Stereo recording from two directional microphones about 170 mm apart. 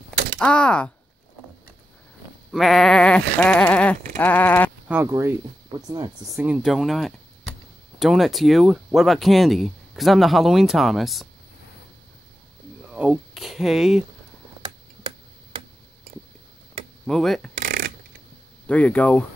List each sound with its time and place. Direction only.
0.4 s speech: 5° left (ahead or behind)
2.5 s speech: centre (ahead or behind)
4.8 s speech: 15° right (ahead or behind)
6.4 s speech: 5° right (ahead or behind)
12.9 s speech: 5° right (ahead or behind)
17.0 s speech: centre (ahead or behind)
17.6 s a sound: 60° right (ahead or behind)
18.7 s speech: 10° left (ahead or behind)